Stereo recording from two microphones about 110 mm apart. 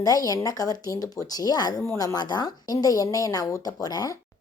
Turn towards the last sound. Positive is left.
turn(degrees=35)  # may be behind; listen again after turning